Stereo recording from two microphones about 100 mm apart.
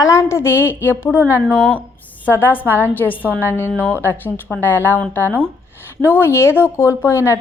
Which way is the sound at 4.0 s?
20° left (ahead or behind).